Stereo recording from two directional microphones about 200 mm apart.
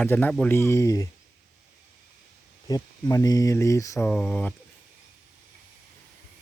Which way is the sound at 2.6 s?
20° left (ahead or behind).